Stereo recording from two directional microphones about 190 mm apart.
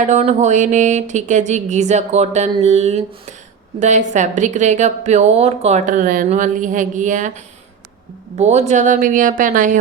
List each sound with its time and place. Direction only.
0.0 s speech: 35° right (ahead or behind)
8.4 s a woman's voice: 35° right (ahead or behind)